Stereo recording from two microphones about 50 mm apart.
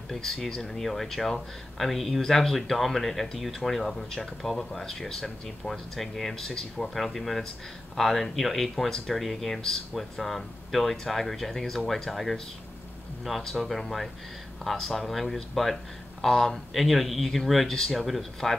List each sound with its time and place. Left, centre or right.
0.1 s speech: centre
13.4 s speech: centre